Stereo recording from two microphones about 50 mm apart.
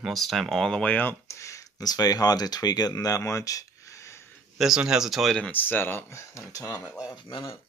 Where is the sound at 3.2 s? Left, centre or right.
Left.